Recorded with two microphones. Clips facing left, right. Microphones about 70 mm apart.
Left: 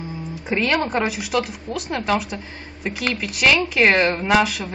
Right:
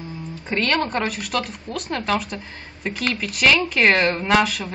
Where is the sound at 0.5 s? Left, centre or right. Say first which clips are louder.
Left 1 dB; centre.